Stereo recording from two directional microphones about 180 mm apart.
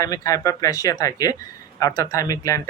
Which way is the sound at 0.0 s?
20° left (ahead or behind).